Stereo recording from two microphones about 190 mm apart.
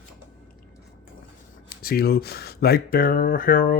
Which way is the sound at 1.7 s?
50° left (ahead or behind).